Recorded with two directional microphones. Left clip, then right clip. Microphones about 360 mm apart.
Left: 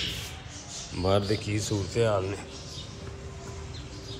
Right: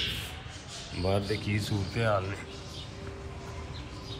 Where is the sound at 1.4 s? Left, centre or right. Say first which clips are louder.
Left 3 dB; centre.